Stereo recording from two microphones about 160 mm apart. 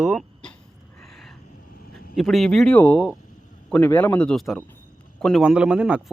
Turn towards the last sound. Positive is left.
turn(degrees=-5)  # may be behind; listen again after turning